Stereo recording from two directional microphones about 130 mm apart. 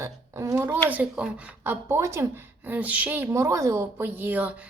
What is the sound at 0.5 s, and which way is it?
A woman's voice, 15° right (ahead or behind).